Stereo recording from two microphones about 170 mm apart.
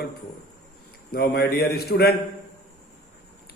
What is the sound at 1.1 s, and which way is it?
A man's voice, 65° left (ahead or behind).